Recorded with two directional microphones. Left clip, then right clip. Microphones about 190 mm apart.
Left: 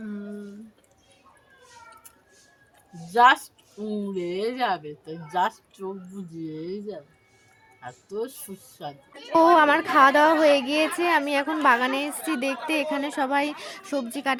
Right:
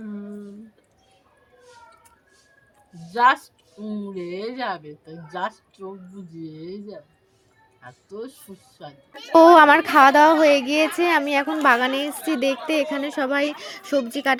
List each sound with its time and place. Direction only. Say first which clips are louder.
3.1 s speech: left 1 dB; 30° left (ahead or behind)
9.3 s a woman's voice: right 6 dB; 25° right (ahead or behind)